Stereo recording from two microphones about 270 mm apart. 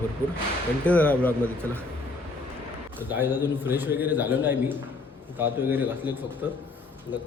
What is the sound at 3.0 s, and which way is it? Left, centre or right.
A man's voice, centre.